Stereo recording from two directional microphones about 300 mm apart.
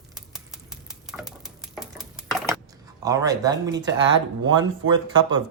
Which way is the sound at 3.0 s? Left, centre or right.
Centre.